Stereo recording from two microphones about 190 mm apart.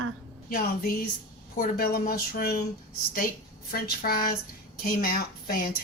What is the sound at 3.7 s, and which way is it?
Speech, 50° left (ahead or behind).